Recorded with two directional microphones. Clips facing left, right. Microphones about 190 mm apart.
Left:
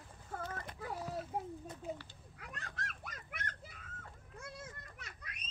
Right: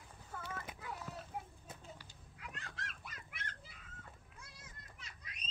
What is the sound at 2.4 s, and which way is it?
Children playing, 45° left (ahead or behind).